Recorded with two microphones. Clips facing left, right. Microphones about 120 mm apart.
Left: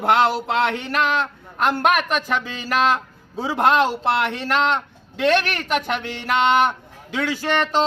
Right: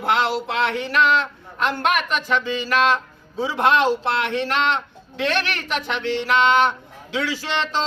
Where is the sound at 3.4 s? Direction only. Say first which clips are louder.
Left 1 dB; 45° left (ahead or behind).